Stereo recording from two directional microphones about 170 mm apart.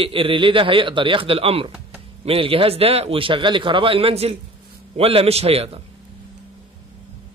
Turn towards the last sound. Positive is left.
turn(degrees=-35)  # may be behind; listen again after turning